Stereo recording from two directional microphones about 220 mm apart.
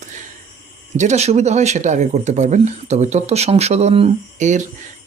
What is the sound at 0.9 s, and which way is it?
Speech, 30° right (ahead or behind).